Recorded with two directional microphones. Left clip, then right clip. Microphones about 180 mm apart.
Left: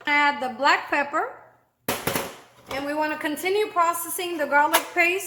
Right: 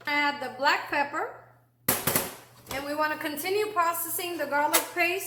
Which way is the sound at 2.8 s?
40° left (ahead or behind).